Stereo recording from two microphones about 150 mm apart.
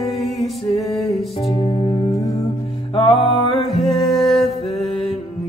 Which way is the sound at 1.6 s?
30° left (ahead or behind).